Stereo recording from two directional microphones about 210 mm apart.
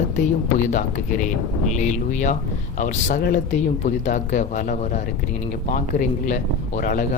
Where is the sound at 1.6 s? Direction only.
35° left (ahead or behind).